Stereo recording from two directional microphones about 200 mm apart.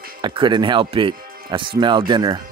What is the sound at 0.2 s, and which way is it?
Speech, 25° right (ahead or behind).